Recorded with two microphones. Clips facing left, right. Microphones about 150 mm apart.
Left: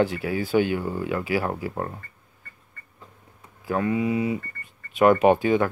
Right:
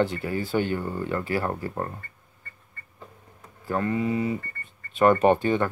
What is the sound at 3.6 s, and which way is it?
Speech, 10° left (ahead or behind).